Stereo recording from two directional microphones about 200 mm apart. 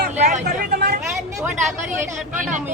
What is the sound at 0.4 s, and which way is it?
Vehicle, 50° right (ahead or behind).